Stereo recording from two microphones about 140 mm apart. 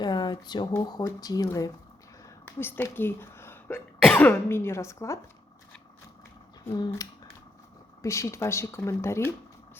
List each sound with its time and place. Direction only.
0.0 s a sound: 30° left (ahead or behind)
0.8 s speech: 30° left (ahead or behind)
4.0 s speech: 5° left (ahead or behind)
4.3 s speech: 15° left (ahead or behind)
6.7 s speech: 25° left (ahead or behind)